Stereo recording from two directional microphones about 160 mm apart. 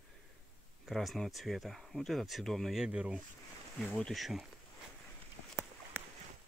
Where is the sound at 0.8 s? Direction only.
Centre (ahead or behind).